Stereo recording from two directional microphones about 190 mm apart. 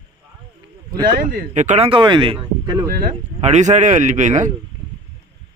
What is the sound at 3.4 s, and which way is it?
Speech, 40° right (ahead or behind).